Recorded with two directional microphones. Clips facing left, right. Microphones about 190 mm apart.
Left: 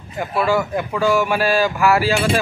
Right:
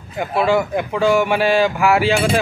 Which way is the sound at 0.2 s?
20° right (ahead or behind).